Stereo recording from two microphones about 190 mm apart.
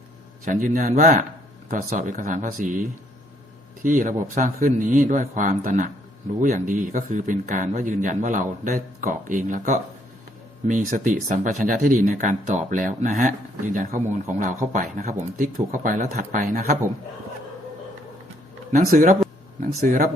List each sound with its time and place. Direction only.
0.4 s a man's voice: 45° right (ahead or behind)
3.8 s a man's voice: 45° right (ahead or behind)
18.7 s a man's voice: 45° right (ahead or behind)